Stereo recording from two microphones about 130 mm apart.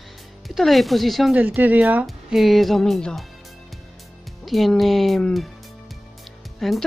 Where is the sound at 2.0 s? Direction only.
Centre (ahead or behind).